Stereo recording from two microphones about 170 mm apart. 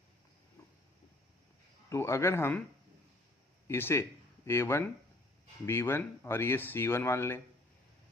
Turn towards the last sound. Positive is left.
turn(degrees=15)  # may be behind; listen again after turning